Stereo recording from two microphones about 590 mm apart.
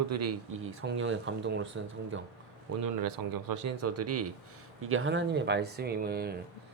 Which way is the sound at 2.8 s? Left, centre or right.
Right.